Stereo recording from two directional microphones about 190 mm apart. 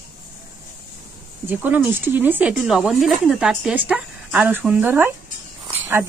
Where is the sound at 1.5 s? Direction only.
10° right (ahead or behind).